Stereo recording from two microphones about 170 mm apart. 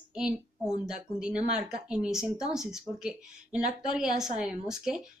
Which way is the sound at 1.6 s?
5° right (ahead or behind).